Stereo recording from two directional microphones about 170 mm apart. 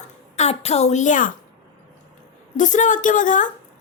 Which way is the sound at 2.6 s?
50° left (ahead or behind).